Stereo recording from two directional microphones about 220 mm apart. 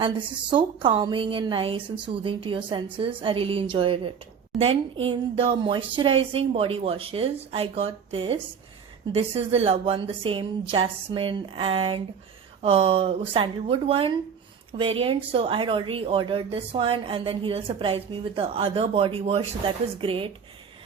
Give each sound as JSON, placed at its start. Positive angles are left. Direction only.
{"t": 0.0, "sound": "speech", "side_deg": -20}